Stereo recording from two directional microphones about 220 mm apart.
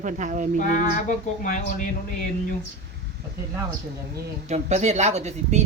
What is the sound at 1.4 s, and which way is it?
Speech, 40° left (ahead or behind).